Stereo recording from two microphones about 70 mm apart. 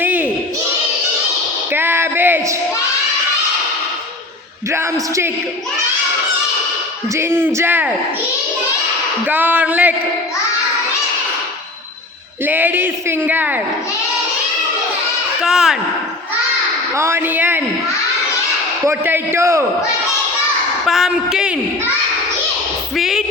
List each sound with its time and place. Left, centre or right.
0.0 s a sound: right
1.7 s a sound: right
7.1 s a man's voice: right
9.2 s speech: right
12.5 s speech: right
15.4 s speech: centre
16.9 s a man's voice: right
18.9 s a man's voice: right
20.8 s a woman's voice: centre
23.0 s a sound: centre